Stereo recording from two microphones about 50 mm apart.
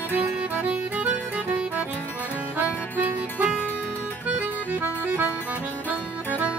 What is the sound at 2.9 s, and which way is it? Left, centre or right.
Music, right.